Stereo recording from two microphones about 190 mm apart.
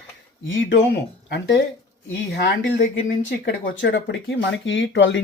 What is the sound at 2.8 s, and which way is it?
Speech, 50° left (ahead or behind).